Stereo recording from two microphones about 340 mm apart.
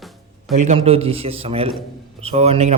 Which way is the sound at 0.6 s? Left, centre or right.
Centre.